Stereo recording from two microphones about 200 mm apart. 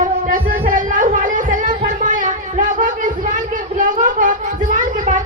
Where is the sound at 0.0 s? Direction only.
40° right (ahead or behind).